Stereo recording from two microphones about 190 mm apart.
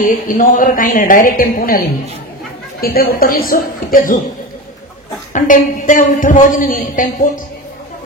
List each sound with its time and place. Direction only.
0.0 s speech: 45° left (ahead or behind)
2.8 s speech: 50° left (ahead or behind)
5.3 s speech: 45° left (ahead or behind)